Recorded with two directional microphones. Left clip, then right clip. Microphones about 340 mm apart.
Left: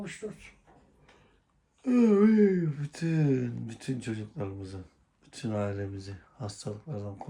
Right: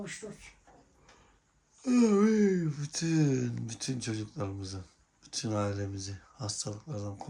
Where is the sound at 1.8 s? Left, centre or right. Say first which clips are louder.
Left 2 dB; centre.